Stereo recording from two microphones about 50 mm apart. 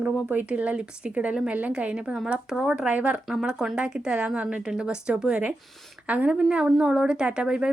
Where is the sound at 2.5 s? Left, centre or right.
Centre.